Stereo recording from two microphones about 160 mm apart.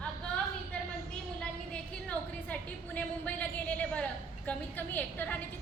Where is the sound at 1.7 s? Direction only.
10° left (ahead or behind).